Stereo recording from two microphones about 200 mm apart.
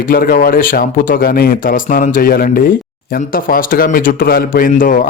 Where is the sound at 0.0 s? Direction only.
45° left (ahead or behind).